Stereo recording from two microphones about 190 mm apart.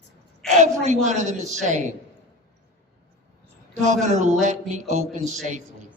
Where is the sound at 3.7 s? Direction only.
40° right (ahead or behind).